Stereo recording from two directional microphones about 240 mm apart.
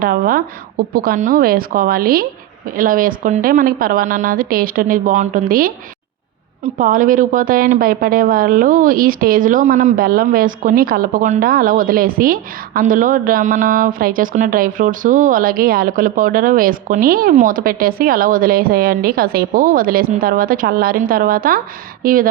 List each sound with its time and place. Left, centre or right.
0.0 s a woman's voice: right